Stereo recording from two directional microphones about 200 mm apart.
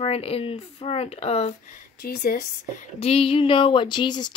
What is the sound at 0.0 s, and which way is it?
Speech, 30° left (ahead or behind).